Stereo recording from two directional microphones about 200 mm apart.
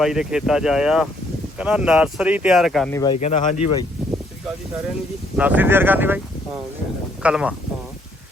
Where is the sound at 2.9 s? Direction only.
20° left (ahead or behind).